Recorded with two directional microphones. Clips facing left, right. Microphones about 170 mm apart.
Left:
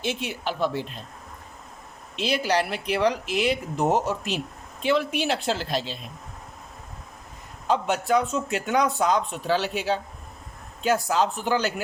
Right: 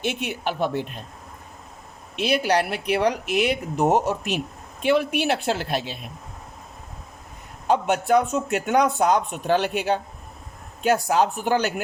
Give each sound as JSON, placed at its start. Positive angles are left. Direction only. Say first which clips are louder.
{"t": 0.0, "sound": "speech", "louder": "right 2 dB", "side_deg": -60}
{"t": 2.1, "sound": "speech", "louder": "right 3 dB", "side_deg": -55}
{"t": 7.7, "sound": "speech", "louder": "right 3 dB", "side_deg": -55}